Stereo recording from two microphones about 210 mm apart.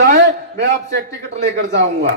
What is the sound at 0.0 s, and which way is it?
A man's voice, 45° right (ahead or behind).